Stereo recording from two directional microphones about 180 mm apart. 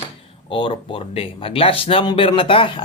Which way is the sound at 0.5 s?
30° left (ahead or behind).